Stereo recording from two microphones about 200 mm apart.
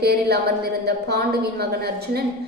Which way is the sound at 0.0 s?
55° right (ahead or behind).